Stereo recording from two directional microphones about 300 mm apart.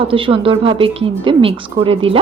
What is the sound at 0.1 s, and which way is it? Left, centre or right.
A woman's voice, centre.